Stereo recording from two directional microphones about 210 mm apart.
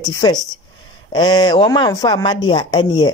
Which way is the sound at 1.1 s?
20° left (ahead or behind).